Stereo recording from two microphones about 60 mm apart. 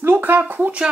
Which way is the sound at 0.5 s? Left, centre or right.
Right.